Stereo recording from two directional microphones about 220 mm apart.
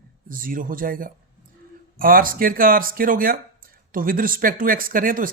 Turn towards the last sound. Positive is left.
turn(degrees=-40)  # may be behind; listen again after turning